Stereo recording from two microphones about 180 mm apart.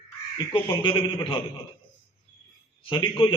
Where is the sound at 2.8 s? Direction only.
25° left (ahead or behind).